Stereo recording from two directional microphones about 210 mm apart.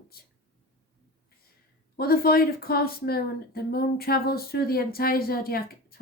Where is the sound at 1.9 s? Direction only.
45° left (ahead or behind).